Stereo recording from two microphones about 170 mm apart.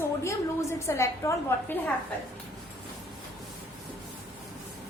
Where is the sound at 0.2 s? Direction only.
15° left (ahead or behind).